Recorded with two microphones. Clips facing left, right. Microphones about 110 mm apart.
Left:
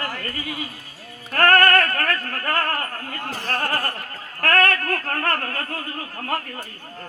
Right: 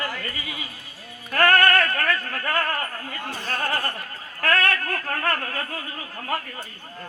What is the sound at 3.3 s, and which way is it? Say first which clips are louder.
Speech: left 3 dB; 90° left.